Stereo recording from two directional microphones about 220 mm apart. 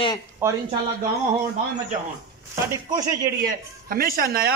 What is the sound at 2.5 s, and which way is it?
Speech, 10° right (ahead or behind).